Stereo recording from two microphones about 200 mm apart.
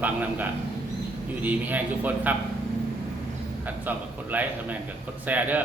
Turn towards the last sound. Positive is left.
turn(degrees=-10)  # may be behind; listen again after turning